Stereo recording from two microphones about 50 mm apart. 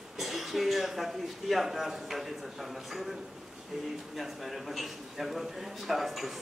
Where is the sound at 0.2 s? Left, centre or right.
Centre.